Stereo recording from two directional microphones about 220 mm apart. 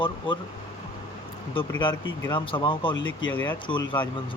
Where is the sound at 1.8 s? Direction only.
20° left (ahead or behind).